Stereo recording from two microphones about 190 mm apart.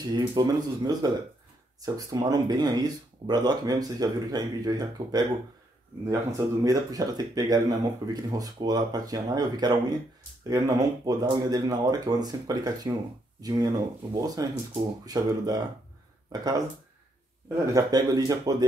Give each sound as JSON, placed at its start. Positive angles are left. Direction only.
{"t": 0.0, "sound": "speech", "side_deg": -20}
{"t": 17.7, "sound": "speech", "side_deg": -20}